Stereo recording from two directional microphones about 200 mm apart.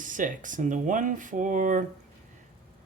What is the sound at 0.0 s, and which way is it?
Speech, 40° right (ahead or behind).